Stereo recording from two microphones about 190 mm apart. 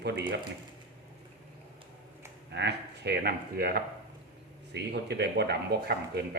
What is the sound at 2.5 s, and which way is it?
Speech, 60° right (ahead or behind).